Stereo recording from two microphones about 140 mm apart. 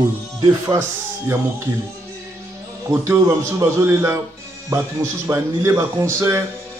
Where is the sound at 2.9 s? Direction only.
20° right (ahead or behind).